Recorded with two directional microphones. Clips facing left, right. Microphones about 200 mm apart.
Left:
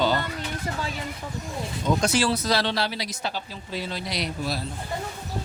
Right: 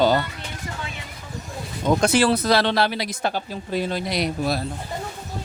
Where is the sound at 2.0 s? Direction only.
55° right (ahead or behind).